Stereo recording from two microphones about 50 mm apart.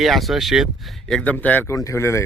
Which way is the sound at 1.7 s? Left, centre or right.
Left.